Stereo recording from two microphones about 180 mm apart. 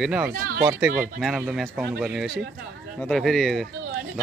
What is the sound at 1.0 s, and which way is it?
Speech, centre (ahead or behind).